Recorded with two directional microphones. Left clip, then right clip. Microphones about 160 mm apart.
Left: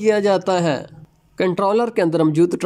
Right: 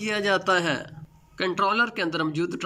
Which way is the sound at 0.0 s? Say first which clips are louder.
Left 8 dB; 30° left (ahead or behind).